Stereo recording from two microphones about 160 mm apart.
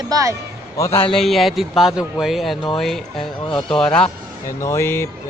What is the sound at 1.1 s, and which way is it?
Speech, centre (ahead or behind).